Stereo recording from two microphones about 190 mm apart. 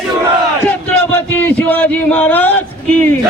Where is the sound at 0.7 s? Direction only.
10° left (ahead or behind).